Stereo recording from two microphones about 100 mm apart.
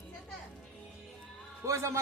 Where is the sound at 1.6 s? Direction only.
30° right (ahead or behind).